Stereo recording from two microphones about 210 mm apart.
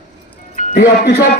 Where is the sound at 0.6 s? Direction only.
35° left (ahead or behind).